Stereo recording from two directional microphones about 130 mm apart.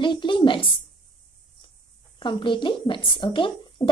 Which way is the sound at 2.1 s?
40° left (ahead or behind).